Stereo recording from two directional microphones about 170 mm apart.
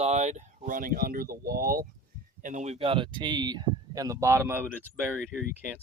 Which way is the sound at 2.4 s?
45° right (ahead or behind).